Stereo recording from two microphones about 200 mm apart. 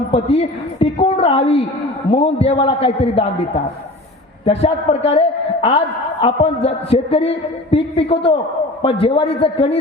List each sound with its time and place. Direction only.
0.1 s a man's voice: 30° left (ahead or behind)